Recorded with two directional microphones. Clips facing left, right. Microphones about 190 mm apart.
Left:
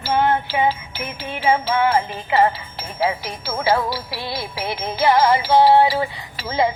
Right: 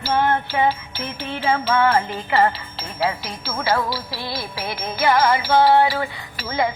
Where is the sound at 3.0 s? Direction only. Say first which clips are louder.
Left 2 dB; 15° left (ahead or behind).